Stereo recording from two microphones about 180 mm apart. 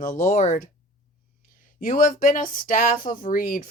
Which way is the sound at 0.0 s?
45° left (ahead or behind).